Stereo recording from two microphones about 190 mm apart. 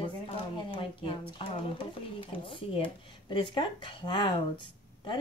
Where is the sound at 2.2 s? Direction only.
25° left (ahead or behind).